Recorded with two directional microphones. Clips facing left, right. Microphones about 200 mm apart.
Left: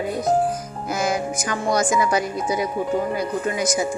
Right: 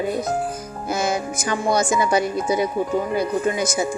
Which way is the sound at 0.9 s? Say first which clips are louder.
Even; 25° right (ahead or behind).